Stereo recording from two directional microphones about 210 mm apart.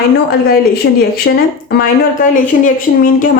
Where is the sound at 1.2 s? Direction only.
50° left (ahead or behind).